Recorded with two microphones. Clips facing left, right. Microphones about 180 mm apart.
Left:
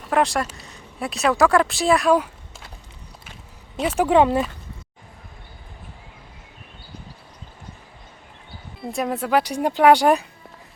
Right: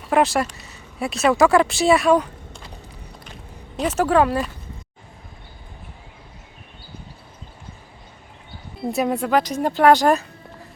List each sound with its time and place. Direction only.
0.1 s speech: 5° right (ahead or behind)
3.9 s speech: 15° left (ahead or behind)
8.9 s speech: centre (ahead or behind)